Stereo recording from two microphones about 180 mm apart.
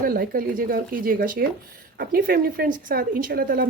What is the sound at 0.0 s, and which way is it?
A woman's voice, 55° right (ahead or behind).